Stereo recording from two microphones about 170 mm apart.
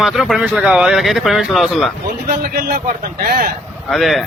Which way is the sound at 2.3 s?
60° right (ahead or behind).